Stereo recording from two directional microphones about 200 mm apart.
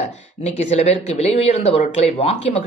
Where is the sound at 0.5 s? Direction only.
35° left (ahead or behind).